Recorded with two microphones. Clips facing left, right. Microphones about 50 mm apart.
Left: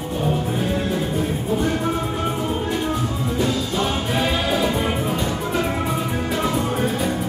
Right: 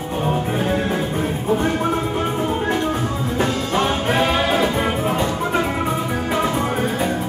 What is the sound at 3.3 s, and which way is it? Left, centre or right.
Music, right.